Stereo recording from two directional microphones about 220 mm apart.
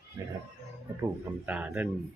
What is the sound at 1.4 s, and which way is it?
Speech, 5° right (ahead or behind).